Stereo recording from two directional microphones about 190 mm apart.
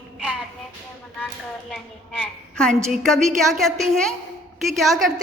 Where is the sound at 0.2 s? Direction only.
5° right (ahead or behind).